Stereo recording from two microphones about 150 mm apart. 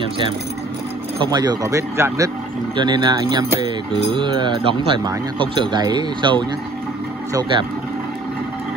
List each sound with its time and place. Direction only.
1.3 s speech: 25° right (ahead or behind)
2.8 s speech: 30° right (ahead or behind)